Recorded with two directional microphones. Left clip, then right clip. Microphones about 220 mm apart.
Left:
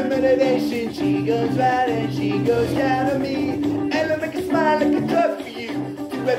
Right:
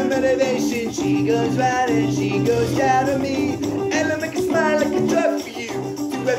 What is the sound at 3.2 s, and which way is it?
Music, 45° right (ahead or behind).